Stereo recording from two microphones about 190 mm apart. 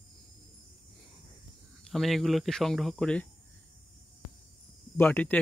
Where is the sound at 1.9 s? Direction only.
Centre (ahead or behind).